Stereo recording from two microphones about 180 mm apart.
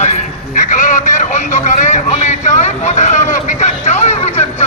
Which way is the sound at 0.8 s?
45° left (ahead or behind).